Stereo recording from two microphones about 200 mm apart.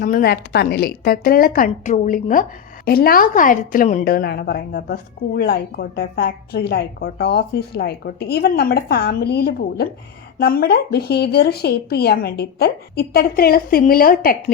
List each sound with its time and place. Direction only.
0.0 s a woman's voice: 45° left (ahead or behind)